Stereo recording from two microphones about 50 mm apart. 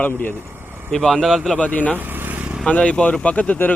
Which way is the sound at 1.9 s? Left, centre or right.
Right.